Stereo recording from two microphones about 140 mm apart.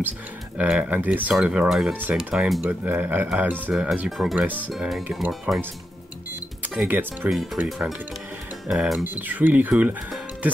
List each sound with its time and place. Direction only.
0.6 s speech: 10° right (ahead or behind)
6.6 s speech: 10° right (ahead or behind)
9.0 s speech: 15° right (ahead or behind)